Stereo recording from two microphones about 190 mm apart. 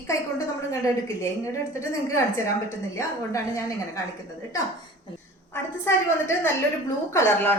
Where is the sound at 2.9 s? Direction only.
15° left (ahead or behind).